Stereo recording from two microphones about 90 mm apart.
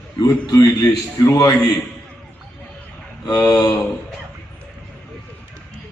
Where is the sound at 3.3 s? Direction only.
45° left (ahead or behind).